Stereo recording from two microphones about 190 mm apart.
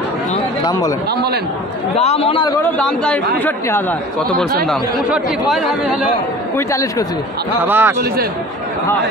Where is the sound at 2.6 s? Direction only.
10° left (ahead or behind).